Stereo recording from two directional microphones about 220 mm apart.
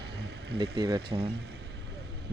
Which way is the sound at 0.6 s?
20° right (ahead or behind).